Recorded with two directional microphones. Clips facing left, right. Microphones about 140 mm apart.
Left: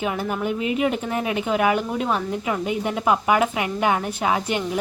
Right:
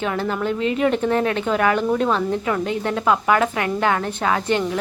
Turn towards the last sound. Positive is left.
turn(degrees=15)  # may be behind; listen again after turning